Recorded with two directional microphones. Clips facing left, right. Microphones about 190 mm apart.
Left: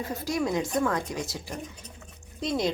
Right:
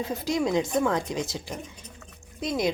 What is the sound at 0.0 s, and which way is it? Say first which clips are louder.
A woman's voice: right 2 dB; 20° right (ahead or behind).